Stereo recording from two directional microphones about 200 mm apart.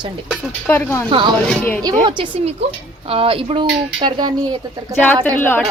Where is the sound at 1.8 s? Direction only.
25° right (ahead or behind).